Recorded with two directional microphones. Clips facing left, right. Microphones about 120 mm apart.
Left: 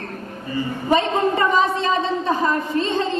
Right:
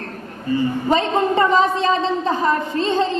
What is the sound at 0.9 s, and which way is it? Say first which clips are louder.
A man's voice: even; 25° right (ahead or behind).